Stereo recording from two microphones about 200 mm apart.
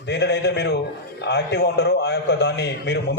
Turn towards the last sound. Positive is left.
turn(degrees=55)  # may be behind; listen again after turning